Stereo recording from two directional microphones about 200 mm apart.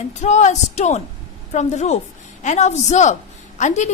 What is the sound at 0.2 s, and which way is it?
A woman's voice, 35° left (ahead or behind).